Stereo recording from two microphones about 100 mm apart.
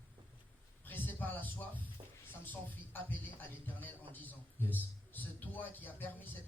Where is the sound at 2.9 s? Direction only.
20° left (ahead or behind).